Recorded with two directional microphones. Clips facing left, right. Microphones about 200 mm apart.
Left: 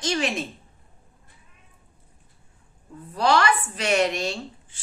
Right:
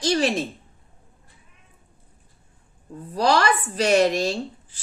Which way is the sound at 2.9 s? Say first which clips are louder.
Right 1 dB; 35° right (ahead or behind).